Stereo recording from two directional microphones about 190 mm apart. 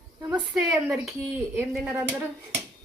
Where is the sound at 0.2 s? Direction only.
20° right (ahead or behind).